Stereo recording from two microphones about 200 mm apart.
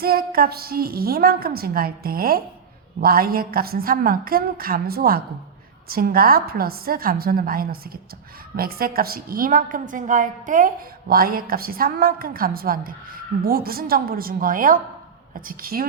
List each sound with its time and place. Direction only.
0.0 s a woman's voice: 50° right (ahead or behind)